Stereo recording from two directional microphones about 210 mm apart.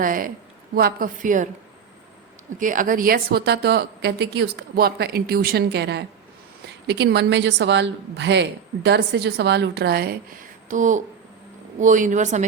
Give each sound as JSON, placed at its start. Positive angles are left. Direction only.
{"t": 0.0, "sound": "a woman's voice", "side_deg": -40}
{"t": 2.6, "sound": "a woman's voice", "side_deg": -40}